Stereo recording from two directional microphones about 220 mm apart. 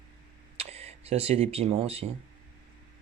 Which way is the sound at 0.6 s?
30° right (ahead or behind).